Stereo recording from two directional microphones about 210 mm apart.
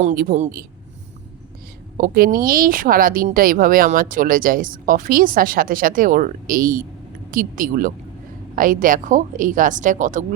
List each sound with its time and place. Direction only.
0.0 s speech: 40° right (ahead or behind)
2.0 s speech: 45° right (ahead or behind)